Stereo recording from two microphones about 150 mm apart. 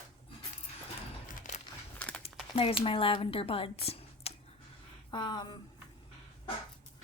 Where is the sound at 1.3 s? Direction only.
50° left (ahead or behind).